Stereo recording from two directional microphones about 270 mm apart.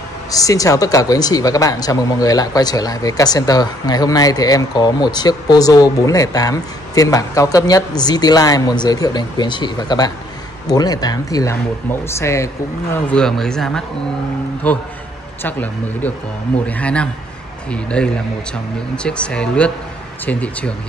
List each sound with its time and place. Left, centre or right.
0.3 s speech: centre